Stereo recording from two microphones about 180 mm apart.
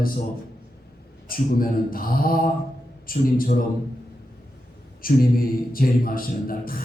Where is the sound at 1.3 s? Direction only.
55° left (ahead or behind).